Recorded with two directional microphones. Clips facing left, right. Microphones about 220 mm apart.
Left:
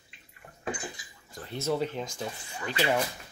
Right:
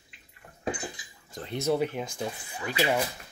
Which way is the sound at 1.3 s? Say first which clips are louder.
Right 3 dB; 15° right (ahead or behind).